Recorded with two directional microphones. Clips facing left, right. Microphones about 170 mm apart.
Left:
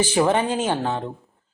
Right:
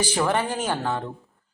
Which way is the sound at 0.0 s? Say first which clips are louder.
Left 4 dB; 20° left (ahead or behind).